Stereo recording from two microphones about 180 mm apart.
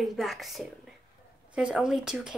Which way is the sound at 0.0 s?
Centre (ahead or behind).